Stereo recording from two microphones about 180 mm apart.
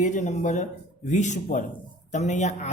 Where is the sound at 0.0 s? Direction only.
40° left (ahead or behind).